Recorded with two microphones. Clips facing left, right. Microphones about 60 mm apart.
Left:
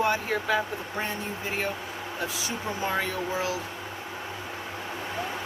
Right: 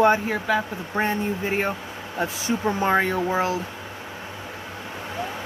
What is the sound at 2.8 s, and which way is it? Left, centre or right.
Speech, right.